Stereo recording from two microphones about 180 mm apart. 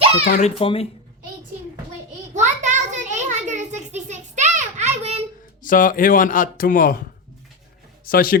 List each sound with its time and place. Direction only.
0.3 s speech: 35° left (ahead or behind)
2.3 s a sound: 40° right (ahead or behind)
5.6 s speech: 50° left (ahead or behind)
8.0 s a man's voice: 55° left (ahead or behind)